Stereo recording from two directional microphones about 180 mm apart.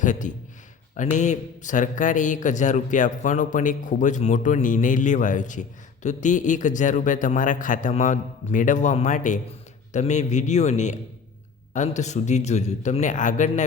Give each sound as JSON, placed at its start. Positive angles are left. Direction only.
{"t": 0.0, "sound": "a man's voice", "side_deg": 45}